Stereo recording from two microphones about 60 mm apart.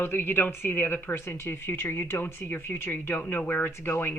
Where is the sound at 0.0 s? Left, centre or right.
Left.